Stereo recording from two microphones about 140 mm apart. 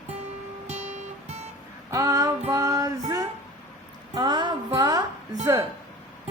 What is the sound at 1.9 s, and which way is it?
Music, 25° right (ahead or behind).